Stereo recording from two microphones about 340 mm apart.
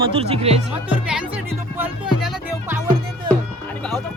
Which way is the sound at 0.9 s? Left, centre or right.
Centre.